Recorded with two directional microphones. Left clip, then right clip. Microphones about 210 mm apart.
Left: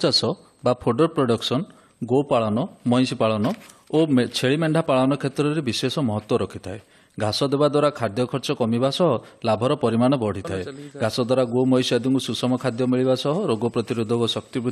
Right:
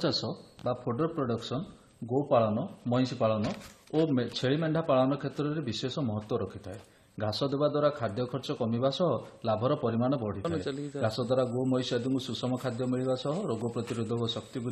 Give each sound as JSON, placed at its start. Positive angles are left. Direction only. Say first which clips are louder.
{"t": 0.0, "sound": "a man's voice", "louder": "left 11 dB", "side_deg": 35}